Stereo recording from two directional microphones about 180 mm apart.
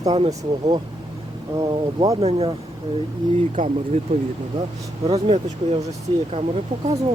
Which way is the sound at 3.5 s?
45° right (ahead or behind).